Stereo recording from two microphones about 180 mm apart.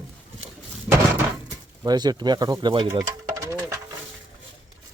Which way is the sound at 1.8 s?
20° right (ahead or behind).